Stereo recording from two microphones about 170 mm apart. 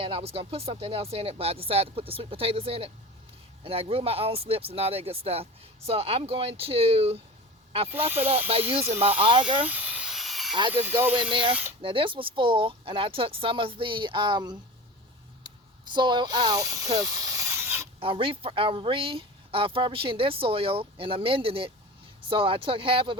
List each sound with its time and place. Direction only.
0.0 s speech: 35° right (ahead or behind)
8.9 s speech: 35° right (ahead or behind)
9.6 s a sound: 10° right (ahead or behind)
10.7 s speech: 10° right (ahead or behind)
11.2 s speech: 30° right (ahead or behind)
15.4 s a sound: 25° right (ahead or behind)
18.0 s speech: 30° right (ahead or behind)